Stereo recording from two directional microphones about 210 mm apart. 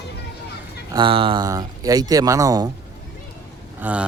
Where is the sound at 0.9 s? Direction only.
25° right (ahead or behind).